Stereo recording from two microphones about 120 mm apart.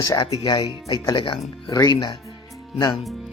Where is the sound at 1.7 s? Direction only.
30° left (ahead or behind).